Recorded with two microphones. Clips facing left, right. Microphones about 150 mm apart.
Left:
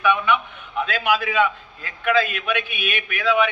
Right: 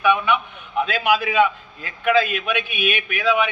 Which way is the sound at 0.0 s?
15° right (ahead or behind).